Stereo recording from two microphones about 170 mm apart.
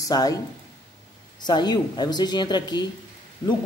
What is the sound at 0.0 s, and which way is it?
Speech, 20° left (ahead or behind).